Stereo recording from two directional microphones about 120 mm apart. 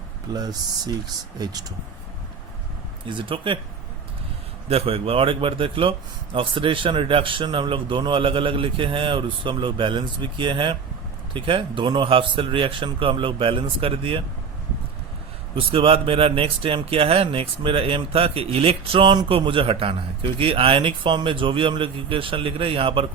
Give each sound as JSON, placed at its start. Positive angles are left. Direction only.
{"t": 0.3, "sound": "speech", "side_deg": -30}
{"t": 3.1, "sound": "speech", "side_deg": -45}
{"t": 4.7, "sound": "speech", "side_deg": -55}
{"t": 15.5, "sound": "speech", "side_deg": -50}